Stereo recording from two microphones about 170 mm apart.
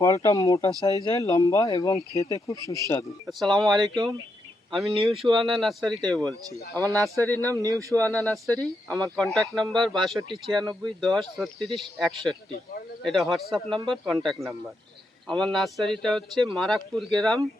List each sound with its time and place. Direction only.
0.0 s speech: 20° left (ahead or behind)
3.2 s speech: centre (ahead or behind)
4.9 s speech: 30° right (ahead or behind)
5.2 s a man's voice: centre (ahead or behind)
7.6 s speech: 20° right (ahead or behind)
7.9 s speech: 10° left (ahead or behind)
10.2 s speech: 30° right (ahead or behind)
10.8 s speech: centre (ahead or behind)